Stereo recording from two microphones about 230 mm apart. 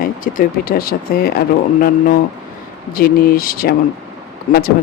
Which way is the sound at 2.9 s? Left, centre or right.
Left.